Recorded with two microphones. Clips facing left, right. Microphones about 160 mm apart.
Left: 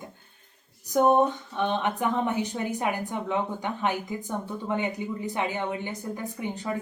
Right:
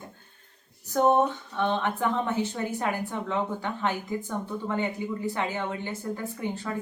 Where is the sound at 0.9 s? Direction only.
15° left (ahead or behind).